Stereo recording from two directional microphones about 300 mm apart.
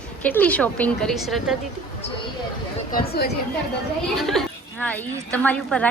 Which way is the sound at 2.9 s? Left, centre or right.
Left.